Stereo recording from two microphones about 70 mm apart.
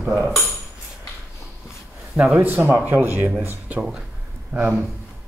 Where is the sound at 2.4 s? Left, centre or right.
Right.